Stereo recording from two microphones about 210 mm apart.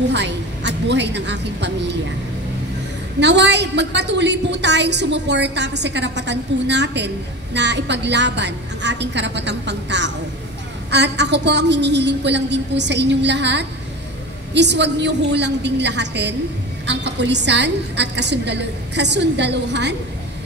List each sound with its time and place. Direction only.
0.1 s a woman's voice: 55° right (ahead or behind)
3.2 s a woman's voice: 55° right (ahead or behind)